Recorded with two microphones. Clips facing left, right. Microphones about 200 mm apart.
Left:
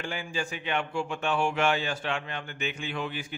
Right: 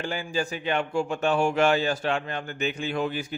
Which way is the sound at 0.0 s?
40° right (ahead or behind).